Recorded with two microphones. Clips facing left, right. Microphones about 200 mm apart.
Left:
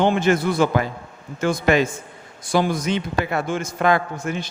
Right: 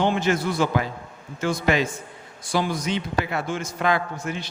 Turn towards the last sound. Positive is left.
turn(degrees=50)  # may be behind; listen again after turning